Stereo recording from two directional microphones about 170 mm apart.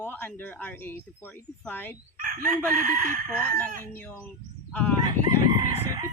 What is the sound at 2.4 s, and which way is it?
Speech, 50° right (ahead or behind).